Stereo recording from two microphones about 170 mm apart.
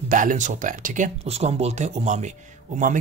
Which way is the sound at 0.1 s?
50° right (ahead or behind).